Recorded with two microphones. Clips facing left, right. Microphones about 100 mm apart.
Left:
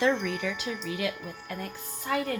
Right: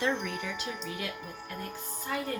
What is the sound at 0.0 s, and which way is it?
Wind chime, 90° left.